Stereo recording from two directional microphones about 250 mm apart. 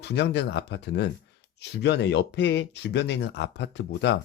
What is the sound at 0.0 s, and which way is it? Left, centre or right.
Speech, left.